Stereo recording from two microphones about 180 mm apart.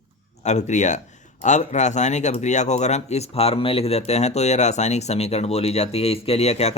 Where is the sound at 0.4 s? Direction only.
40° left (ahead or behind).